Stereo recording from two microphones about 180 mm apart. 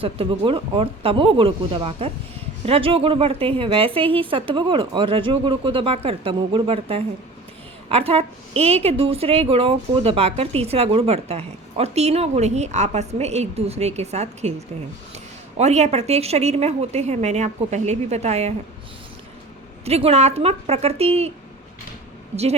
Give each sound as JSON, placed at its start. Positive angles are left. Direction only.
{"t": 0.0, "sound": "a woman's voice", "side_deg": -30}
{"t": 19.8, "sound": "a woman's voice", "side_deg": -35}